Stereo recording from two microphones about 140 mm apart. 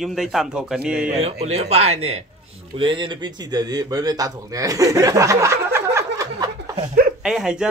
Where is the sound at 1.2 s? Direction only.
50° right (ahead or behind).